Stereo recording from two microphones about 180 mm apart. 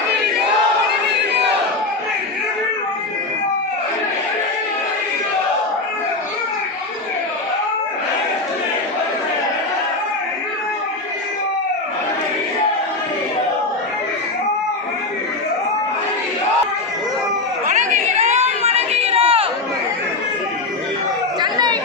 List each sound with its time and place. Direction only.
17.7 s chatter: 40° right (ahead or behind)
21.4 s chatter: 25° right (ahead or behind)